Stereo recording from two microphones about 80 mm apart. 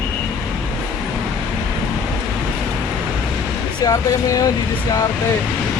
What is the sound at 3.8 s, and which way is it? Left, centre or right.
Speech, left.